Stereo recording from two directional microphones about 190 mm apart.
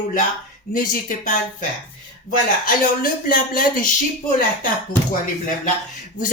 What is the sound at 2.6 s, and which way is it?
Speech, 50° left (ahead or behind).